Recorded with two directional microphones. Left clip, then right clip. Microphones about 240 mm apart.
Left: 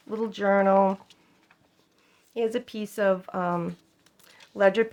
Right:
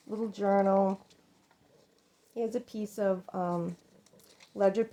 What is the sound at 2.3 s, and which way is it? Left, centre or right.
Speech, centre.